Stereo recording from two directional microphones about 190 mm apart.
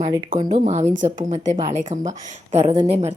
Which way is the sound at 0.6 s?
35° right (ahead or behind).